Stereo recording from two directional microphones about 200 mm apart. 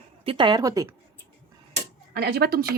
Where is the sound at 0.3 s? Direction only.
25° right (ahead or behind).